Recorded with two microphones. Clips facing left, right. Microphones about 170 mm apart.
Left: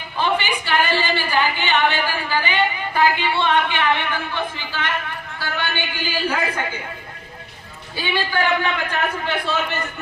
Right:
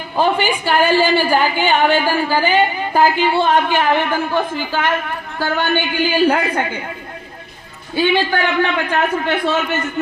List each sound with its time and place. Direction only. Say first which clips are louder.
0.2 s a woman's voice: right 5 dB; 45° right (ahead or behind)
7.9 s a man's voice: right 7 dB; 55° right (ahead or behind)